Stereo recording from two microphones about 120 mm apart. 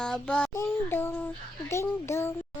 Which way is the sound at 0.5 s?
20° left (ahead or behind).